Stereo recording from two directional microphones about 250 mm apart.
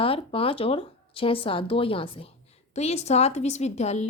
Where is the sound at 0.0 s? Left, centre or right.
Left.